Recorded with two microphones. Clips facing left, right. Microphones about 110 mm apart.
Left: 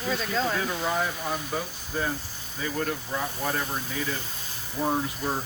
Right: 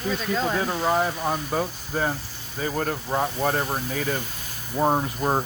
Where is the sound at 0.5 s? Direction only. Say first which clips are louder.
Right 5 dB; 25° right (ahead or behind).